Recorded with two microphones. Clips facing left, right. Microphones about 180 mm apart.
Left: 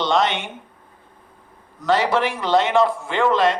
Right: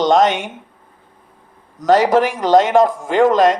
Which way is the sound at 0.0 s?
45° right (ahead or behind).